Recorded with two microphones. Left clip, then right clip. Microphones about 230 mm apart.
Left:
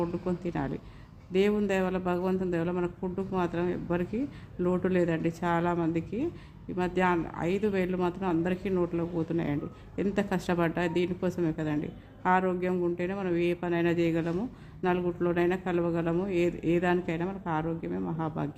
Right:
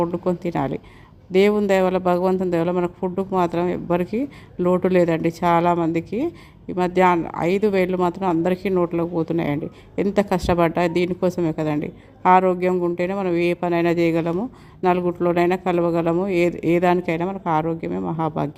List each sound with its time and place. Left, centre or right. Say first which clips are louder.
0.0 s speech: right 10 dB; right